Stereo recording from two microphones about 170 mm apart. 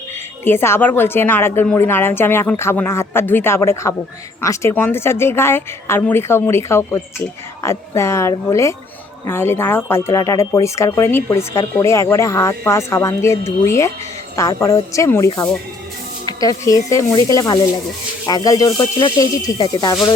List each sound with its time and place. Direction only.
0.4 s speech: 15° left (ahead or behind)